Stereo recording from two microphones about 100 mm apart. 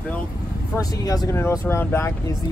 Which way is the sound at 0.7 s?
35° left (ahead or behind).